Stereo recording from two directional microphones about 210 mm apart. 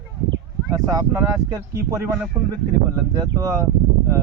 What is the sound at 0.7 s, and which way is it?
Speech, 15° right (ahead or behind).